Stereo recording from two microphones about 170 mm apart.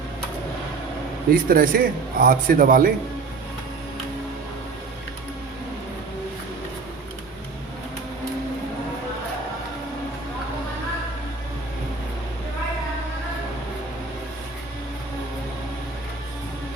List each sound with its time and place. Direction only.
1.3 s a man's voice: 55° right (ahead or behind)